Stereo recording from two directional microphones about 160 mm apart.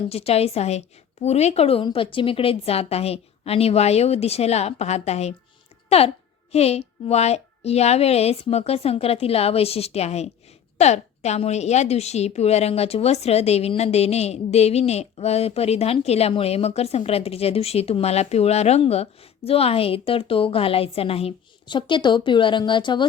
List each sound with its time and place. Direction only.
0.1 s a woman's voice: 40° left (ahead or behind)